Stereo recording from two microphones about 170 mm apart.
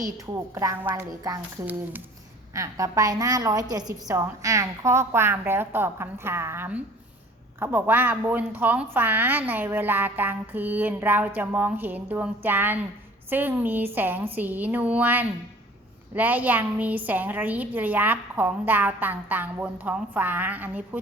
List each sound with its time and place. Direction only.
0.3 s a woman's voice: 20° right (ahead or behind)
2.5 s a woman's voice: 20° right (ahead or behind)